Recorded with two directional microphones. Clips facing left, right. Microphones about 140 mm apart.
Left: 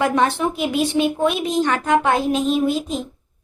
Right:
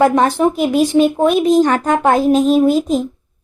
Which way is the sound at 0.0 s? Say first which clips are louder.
Right 6 dB; 40° right (ahead or behind).